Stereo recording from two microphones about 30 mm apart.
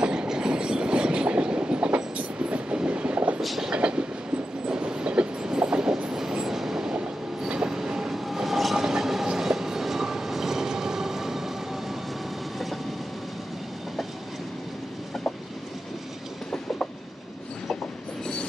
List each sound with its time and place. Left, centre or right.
0.0 s train: right
3.4 s train: centre
3.7 s train: right
6.1 s train: centre
8.1 s train: centre
18.2 s train: left